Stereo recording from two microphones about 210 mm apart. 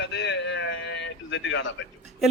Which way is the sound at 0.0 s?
55° left (ahead or behind).